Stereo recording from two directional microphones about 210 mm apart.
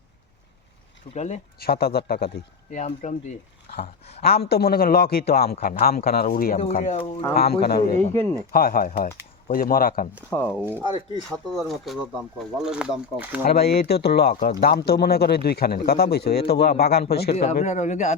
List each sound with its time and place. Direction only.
1.1 s speech: 35° left (ahead or behind)
1.5 s a man's voice: 50° left (ahead or behind)
2.7 s speech: 35° left (ahead or behind)
4.2 s a man's voice: 50° left (ahead or behind)
6.7 s speech: 30° left (ahead or behind)
7.3 s a man's voice: 50° left (ahead or behind)
10.2 s speech: 10° left (ahead or behind)
10.6 s speech: 10° right (ahead or behind)
13.4 s a man's voice: 50° left (ahead or behind)
17.3 s speech: 30° left (ahead or behind)